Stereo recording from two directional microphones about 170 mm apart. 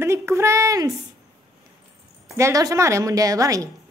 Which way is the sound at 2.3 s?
20° right (ahead or behind).